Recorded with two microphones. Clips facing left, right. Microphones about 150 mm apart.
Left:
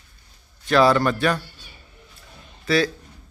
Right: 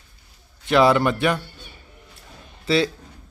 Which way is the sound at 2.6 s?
25° right (ahead or behind).